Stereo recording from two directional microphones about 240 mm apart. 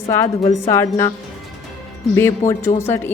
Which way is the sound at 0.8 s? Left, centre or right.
Centre.